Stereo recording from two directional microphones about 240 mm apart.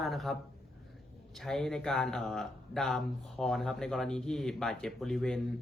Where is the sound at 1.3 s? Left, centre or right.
Centre.